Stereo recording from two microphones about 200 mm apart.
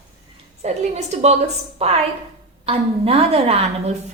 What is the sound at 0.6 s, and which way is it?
A woman's voice, 35° right (ahead or behind).